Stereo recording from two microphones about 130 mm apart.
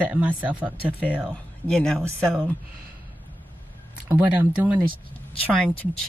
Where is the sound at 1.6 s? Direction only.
5° left (ahead or behind).